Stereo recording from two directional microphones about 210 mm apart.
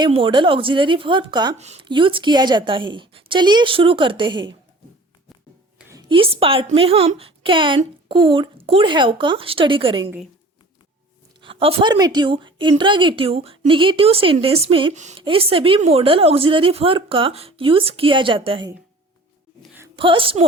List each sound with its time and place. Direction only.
0.0 s a woman's voice: 25° right (ahead or behind)
1.5 s a woman's voice: 30° right (ahead or behind)
5.9 s a woman's voice: 20° right (ahead or behind)
11.3 s a woman's voice: 25° right (ahead or behind)
20.0 s a woman's voice: 25° right (ahead or behind)